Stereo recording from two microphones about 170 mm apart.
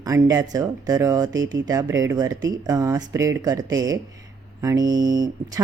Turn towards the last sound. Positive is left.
turn(degrees=-20)  # may be behind; listen again after turning